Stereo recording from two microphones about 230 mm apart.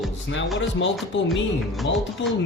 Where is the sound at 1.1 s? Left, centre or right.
Left.